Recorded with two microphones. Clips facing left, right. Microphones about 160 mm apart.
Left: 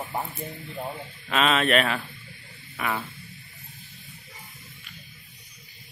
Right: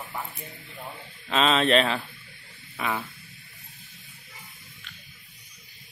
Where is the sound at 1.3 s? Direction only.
30° right (ahead or behind).